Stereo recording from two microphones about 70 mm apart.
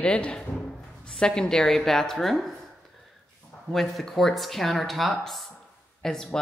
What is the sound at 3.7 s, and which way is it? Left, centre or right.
A man's voice, centre.